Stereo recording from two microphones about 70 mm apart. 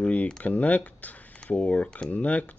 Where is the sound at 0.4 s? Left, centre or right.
Left.